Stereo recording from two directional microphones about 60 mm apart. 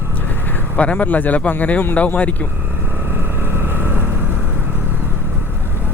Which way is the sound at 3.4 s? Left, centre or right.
Right.